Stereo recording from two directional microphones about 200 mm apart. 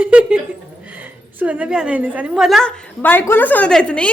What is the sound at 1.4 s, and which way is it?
A woman's voice, 5° right (ahead or behind).